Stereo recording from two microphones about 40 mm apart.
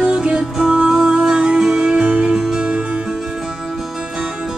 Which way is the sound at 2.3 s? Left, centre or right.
Centre.